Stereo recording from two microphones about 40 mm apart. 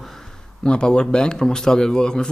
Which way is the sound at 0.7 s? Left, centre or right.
Left.